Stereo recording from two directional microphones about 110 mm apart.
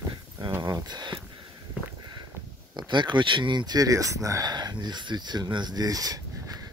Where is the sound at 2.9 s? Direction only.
45° right (ahead or behind).